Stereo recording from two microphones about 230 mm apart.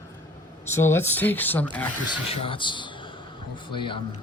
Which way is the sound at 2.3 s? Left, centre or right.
Left.